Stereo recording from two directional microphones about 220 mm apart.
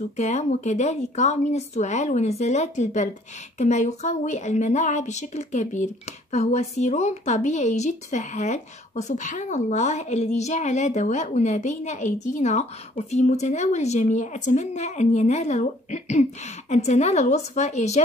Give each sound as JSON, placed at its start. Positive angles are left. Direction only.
{"t": 0.2, "sound": "speech", "side_deg": 30}